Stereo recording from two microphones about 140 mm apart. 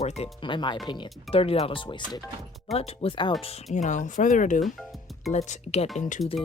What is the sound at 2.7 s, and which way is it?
Speech, 50° left (ahead or behind).